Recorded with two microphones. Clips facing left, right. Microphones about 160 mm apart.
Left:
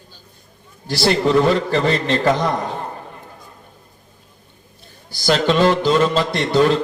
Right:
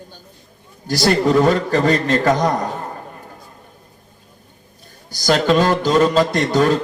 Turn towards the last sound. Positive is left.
turn(degrees=-45)  # may be behind; listen again after turning